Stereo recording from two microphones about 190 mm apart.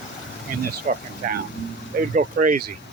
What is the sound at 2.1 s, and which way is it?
Speech, 45° right (ahead or behind).